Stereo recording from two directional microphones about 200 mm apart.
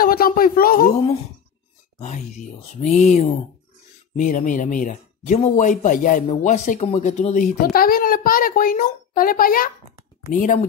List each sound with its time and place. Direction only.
0.0 s a sound: 45° left (ahead or behind)
2.0 s speech: 35° left (ahead or behind)
7.6 s a child's voice: 50° left (ahead or behind)